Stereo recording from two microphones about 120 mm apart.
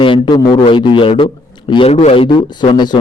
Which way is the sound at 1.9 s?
60° left (ahead or behind).